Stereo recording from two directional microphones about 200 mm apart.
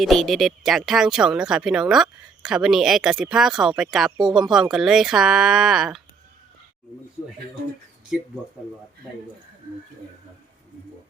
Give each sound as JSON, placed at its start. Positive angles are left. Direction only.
{"t": 0.0, "sound": "speech", "side_deg": 0}